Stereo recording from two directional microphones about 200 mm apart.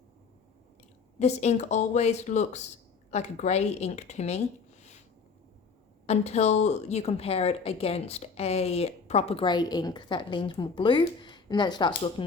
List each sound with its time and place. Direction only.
1.2 s speech: 35° left (ahead or behind)
6.1 s a woman's voice: 30° left (ahead or behind)